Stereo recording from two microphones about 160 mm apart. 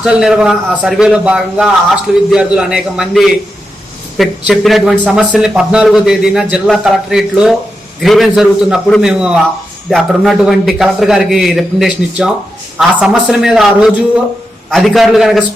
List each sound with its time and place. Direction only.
0.0 s a man's voice: 5° right (ahead or behind)